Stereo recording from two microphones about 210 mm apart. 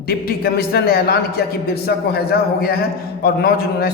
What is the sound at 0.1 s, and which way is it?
A man's voice, 45° left (ahead or behind).